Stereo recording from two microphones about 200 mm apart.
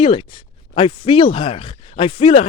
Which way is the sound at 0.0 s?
25° left (ahead or behind).